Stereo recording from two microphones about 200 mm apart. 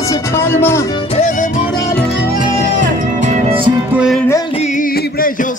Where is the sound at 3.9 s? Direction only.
5° right (ahead or behind).